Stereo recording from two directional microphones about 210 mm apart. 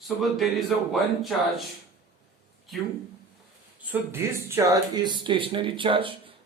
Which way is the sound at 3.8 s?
10° right (ahead or behind).